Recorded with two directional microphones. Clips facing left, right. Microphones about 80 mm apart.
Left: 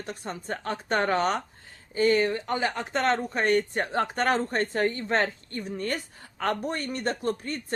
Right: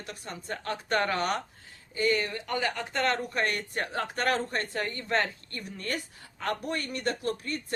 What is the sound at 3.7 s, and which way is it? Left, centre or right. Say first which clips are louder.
A woman's voice: left 5 dB; left.